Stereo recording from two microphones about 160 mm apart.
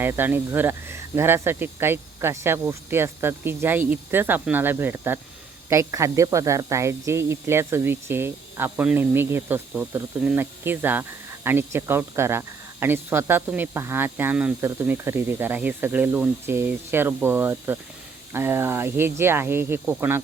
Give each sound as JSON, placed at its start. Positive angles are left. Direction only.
{"t": 0.0, "sound": "speech", "side_deg": -15}